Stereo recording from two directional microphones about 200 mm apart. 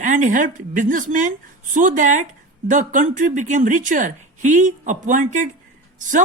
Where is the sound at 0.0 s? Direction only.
40° right (ahead or behind).